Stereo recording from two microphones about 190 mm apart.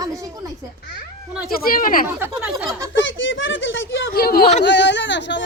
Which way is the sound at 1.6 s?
50° left (ahead or behind).